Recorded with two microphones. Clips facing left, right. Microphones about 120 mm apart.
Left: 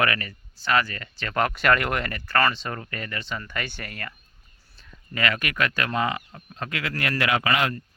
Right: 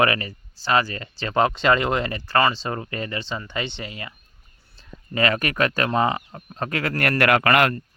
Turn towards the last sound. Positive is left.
turn(degrees=-60)  # may be behind; listen again after turning